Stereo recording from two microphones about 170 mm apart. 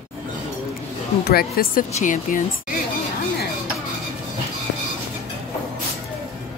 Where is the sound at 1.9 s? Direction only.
50° left (ahead or behind).